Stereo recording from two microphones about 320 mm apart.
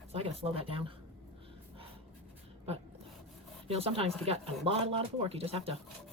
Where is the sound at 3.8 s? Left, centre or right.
Centre.